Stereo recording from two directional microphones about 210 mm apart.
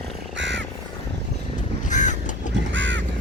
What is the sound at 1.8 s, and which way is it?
Crow, 35° left (ahead or behind).